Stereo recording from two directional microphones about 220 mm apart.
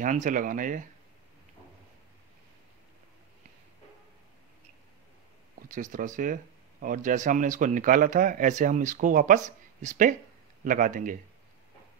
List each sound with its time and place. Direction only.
0.0 s speech: 35° right (ahead or behind)
5.6 s speech: 35° right (ahead or behind)